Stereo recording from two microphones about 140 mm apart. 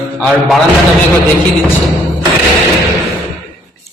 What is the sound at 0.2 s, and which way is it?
Speech, centre (ahead or behind).